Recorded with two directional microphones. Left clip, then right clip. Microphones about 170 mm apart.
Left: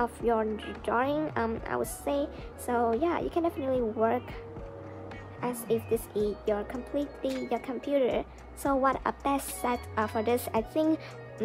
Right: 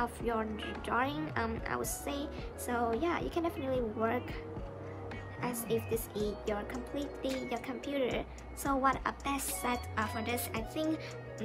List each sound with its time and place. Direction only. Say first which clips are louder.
0.0 s speech: left 7 dB; 30° left (ahead or behind)
5.4 s speech: left 5 dB; 30° left (ahead or behind); by 11.4 s 45° left (ahead or behind)